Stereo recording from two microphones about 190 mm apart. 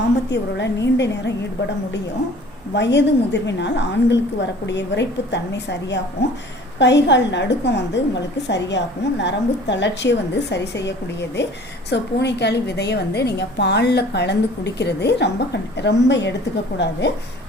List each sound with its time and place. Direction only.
0.3 s a woman's voice: 65° left (ahead or behind)
2.7 s a woman's voice: 65° left (ahead or behind)